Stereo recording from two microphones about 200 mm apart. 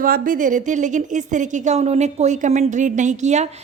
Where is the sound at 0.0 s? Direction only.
45° right (ahead or behind).